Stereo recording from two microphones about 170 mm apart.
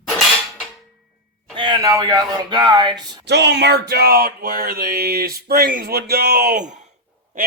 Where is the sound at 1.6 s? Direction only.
25° right (ahead or behind).